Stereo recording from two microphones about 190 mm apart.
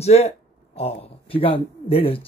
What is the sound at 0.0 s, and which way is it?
Speech, 35° left (ahead or behind).